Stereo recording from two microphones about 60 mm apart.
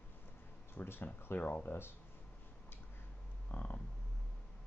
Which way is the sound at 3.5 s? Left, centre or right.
Left.